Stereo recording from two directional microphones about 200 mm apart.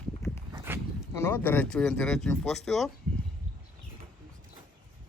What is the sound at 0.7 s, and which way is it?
Dog, 10° right (ahead or behind).